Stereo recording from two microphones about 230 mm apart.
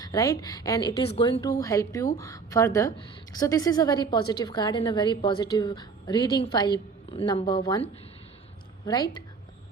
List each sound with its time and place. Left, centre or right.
0.0 s a woman's voice: centre
8.9 s a woman's voice: centre